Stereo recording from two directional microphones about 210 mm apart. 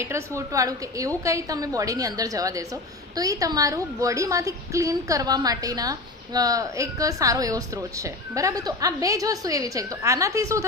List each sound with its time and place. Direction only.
0.0 s a woman's voice: 15° right (ahead or behind)